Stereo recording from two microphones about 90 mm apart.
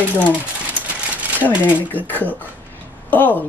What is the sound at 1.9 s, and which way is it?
Speech, 20° left (ahead or behind).